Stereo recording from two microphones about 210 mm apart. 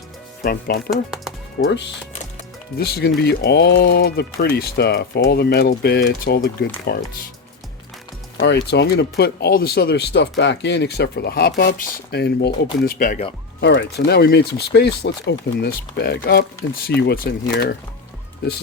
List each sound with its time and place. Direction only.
0.9 s speech: centre (ahead or behind)
2.7 s speech: 50° left (ahead or behind)
8.4 s speech: 55° left (ahead or behind)
12.8 s speech: 40° left (ahead or behind)
13.6 s speech: 55° left (ahead or behind)